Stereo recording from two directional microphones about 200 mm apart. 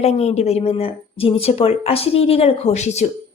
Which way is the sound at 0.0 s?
30° left (ahead or behind).